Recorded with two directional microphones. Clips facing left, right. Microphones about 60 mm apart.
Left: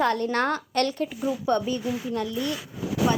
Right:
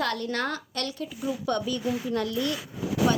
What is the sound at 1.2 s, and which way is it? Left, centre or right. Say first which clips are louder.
A woman's voice: left 3 dB; left.